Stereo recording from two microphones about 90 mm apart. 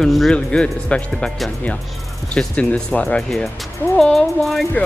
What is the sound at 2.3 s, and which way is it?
Speech, 15° left (ahead or behind).